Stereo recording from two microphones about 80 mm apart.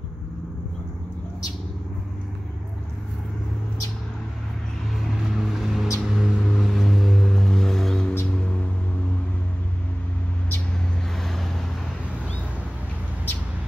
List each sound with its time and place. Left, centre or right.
5.2 s vehicle: centre
6.6 s music: centre
11.1 s vehicle: centre